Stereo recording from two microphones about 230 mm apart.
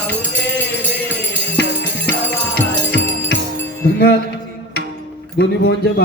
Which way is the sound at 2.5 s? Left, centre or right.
Left.